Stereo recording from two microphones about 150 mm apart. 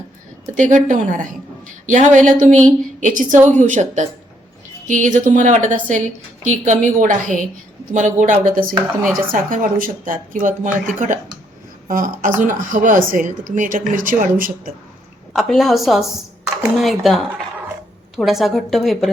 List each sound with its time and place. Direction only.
0.5 s a woman's voice: 60° right (ahead or behind)
15.3 s a woman's voice: centre (ahead or behind)
18.2 s a woman's voice: centre (ahead or behind)